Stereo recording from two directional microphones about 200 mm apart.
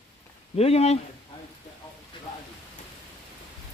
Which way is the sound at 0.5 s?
30° left (ahead or behind).